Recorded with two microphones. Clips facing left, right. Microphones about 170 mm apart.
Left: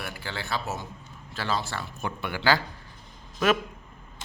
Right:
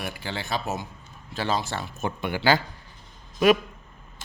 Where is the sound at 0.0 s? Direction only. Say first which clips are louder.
Right 3 dB; 20° right (ahead or behind).